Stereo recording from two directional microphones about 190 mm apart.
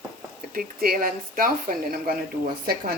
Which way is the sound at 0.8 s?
50° right (ahead or behind).